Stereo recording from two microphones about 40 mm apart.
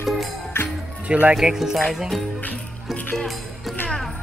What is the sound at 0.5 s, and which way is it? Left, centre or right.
Music, left.